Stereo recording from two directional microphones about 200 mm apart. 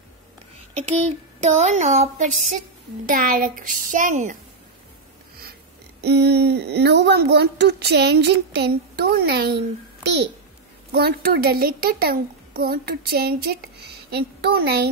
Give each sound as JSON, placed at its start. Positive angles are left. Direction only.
{"t": 0.7, "sound": "speech", "side_deg": -35}
{"t": 5.4, "sound": "speech", "side_deg": -55}
{"t": 10.9, "sound": "a child's voice", "side_deg": -50}